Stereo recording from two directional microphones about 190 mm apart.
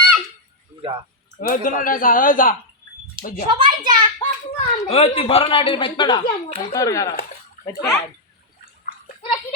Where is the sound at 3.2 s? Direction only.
25° right (ahead or behind).